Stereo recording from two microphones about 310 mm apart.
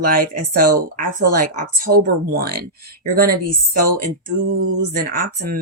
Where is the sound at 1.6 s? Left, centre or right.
Right.